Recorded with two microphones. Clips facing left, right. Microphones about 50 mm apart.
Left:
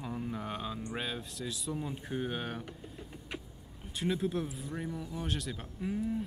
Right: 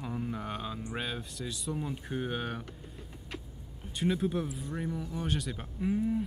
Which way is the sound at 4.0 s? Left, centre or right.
Centre.